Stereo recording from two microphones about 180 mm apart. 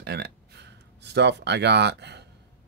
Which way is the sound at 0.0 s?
65° right (ahead or behind).